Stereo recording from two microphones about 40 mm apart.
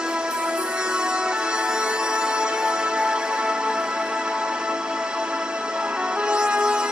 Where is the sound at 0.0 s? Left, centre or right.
Right.